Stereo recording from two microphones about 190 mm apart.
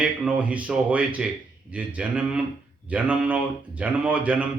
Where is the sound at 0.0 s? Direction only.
5° right (ahead or behind).